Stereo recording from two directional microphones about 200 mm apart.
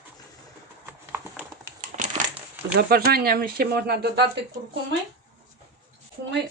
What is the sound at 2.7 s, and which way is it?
Speech, 50° right (ahead or behind).